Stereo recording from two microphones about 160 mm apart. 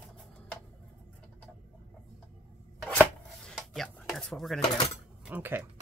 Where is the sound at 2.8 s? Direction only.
5° left (ahead or behind).